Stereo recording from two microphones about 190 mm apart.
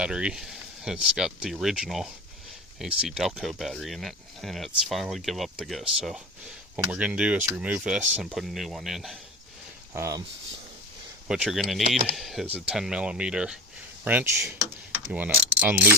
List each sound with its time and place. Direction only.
0.0 s speech: 5° right (ahead or behind)
9.9 s speech: 15° right (ahead or behind)
11.3 s speech: centre (ahead or behind)
14.9 s mechanisms: 10° right (ahead or behind)